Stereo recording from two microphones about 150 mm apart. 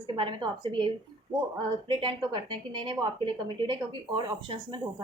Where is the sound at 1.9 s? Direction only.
30° right (ahead or behind).